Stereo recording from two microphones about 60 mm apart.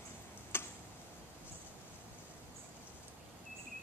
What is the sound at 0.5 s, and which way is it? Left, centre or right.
Tick-tock, left.